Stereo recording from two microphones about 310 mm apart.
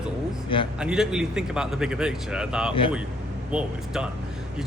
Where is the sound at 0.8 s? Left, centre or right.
Centre.